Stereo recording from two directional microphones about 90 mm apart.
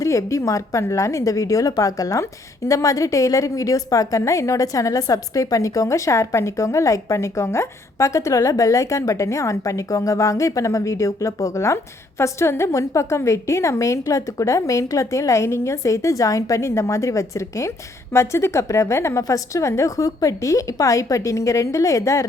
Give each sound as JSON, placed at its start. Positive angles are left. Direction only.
{"t": 0.0, "sound": "a woman's voice", "side_deg": 35}